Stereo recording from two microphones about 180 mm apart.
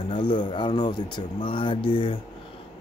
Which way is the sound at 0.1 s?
25° left (ahead or behind).